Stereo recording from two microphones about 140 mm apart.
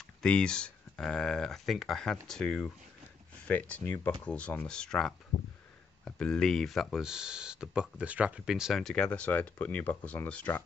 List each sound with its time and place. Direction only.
0.0 s speech: 5° left (ahead or behind)
5.3 s a sound: 50° left (ahead or behind)
6.0 s speech: 5° left (ahead or behind)